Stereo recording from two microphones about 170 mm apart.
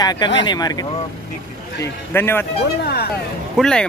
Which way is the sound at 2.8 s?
65° left (ahead or behind).